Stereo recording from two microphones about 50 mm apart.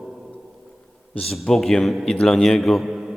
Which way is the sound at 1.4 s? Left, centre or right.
Centre.